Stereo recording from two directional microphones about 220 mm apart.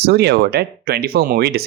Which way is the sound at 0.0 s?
45° right (ahead or behind).